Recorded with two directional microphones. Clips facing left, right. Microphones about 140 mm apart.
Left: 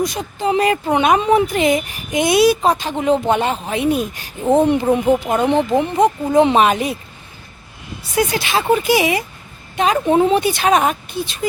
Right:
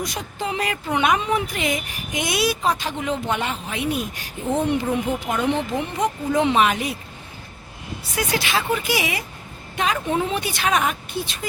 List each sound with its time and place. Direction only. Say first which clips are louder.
0.0 s speech: left 8 dB; 25° left (ahead or behind)
8.1 s speech: left 6 dB; 25° left (ahead or behind)